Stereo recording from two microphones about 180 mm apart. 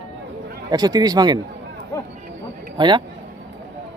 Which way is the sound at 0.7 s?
20° right (ahead or behind).